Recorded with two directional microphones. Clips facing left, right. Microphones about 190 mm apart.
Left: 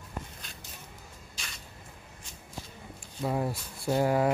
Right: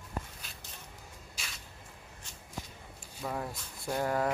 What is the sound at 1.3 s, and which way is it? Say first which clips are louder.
Spray: left 1 dB; 5° right (ahead or behind).